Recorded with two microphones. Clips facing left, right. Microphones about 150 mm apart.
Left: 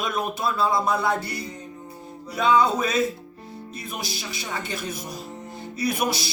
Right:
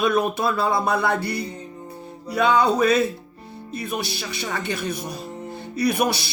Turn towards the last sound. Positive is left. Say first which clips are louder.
# right 4 dB
turn(degrees=-65)  # may be behind; listen again after turning